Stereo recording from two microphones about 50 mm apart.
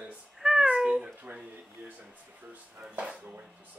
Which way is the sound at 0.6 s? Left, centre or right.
Centre.